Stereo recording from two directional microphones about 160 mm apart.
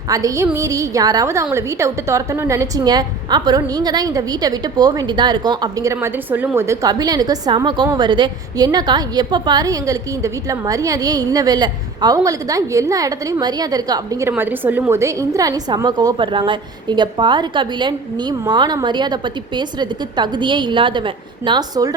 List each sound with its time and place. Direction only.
0.1 s a woman's voice: 20° right (ahead or behind)